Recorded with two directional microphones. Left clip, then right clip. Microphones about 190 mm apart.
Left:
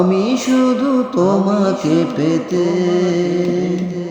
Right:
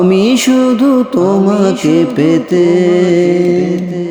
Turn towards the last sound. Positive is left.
turn(degrees=-40)  # may be behind; listen again after turning